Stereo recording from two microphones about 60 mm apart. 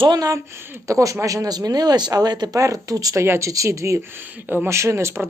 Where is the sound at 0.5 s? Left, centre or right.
Right.